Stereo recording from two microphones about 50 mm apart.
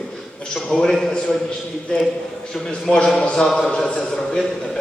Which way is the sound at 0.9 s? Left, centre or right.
Centre.